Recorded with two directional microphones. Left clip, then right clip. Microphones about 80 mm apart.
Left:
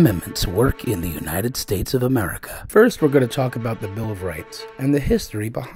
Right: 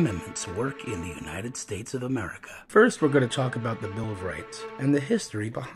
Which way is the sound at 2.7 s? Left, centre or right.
Left.